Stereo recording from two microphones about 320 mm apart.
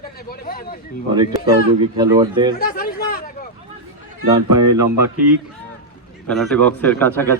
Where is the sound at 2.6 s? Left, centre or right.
Left.